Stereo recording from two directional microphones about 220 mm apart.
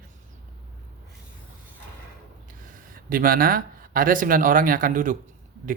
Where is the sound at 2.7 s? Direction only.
40° right (ahead or behind).